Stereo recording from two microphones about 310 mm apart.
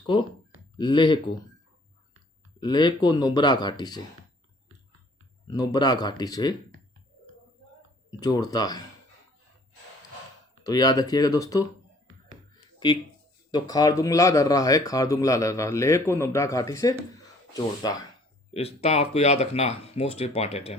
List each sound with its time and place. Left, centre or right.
0.0 s speech: centre
2.6 s speech: centre
5.5 s speech: centre
8.2 s speech: centre
10.6 s speech: centre
13.5 s speech: centre
17.2 s a sound: centre
18.5 s speech: centre